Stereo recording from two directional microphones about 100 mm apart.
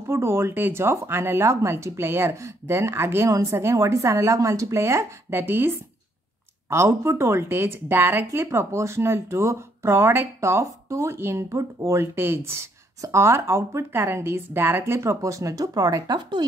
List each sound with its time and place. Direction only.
0.0 s speech: 25° right (ahead or behind); by 16.4 s 45° right (ahead or behind)